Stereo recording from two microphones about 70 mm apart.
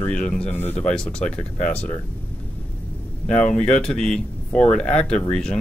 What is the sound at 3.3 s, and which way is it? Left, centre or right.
Speech, centre.